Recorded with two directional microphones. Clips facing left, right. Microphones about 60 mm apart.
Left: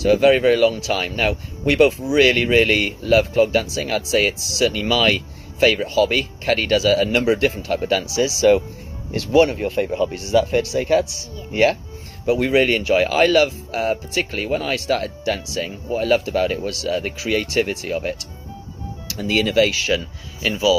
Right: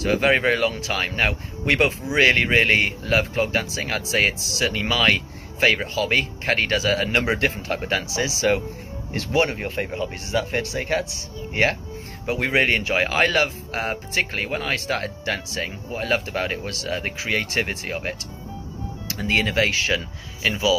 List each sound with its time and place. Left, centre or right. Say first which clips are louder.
0.0 s speech: left 5 dB; right